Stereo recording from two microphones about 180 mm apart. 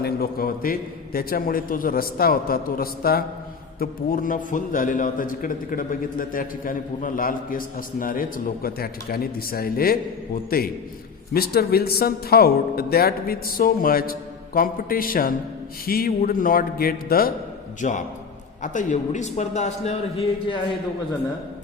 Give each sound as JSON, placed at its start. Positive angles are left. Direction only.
{"t": 0.0, "sound": "a man's voice", "side_deg": 55}
{"t": 17.7, "sound": "a man's voice", "side_deg": 45}